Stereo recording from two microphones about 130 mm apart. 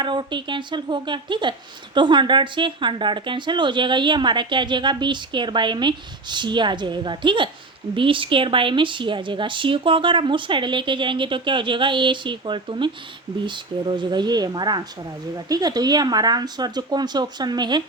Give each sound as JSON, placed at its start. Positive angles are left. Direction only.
{"t": 0.0, "sound": "a woman's voice", "side_deg": -35}